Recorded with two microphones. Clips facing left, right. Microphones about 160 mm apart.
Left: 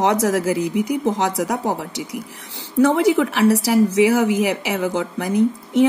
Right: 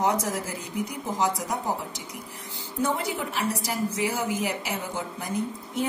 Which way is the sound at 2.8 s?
90° left.